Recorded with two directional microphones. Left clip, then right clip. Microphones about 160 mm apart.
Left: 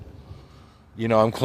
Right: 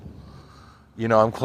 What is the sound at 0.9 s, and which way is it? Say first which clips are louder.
Speech: right 1 dB; 25° left (ahead or behind).